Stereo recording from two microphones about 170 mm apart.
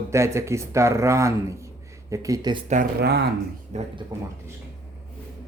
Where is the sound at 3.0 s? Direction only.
75° right (ahead or behind).